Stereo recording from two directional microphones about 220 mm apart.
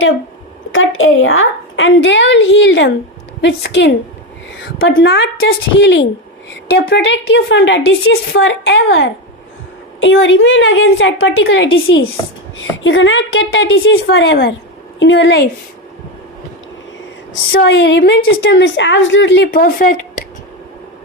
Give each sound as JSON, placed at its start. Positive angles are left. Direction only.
{"t": 0.7, "sound": "a woman's voice", "side_deg": 60}
{"t": 17.5, "sound": "a woman's voice", "side_deg": 55}